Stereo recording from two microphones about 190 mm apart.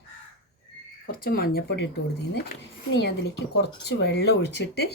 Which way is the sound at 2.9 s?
60° left (ahead or behind).